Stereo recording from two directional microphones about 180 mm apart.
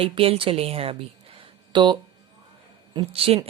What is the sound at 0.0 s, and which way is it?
A woman's voice, 30° right (ahead or behind).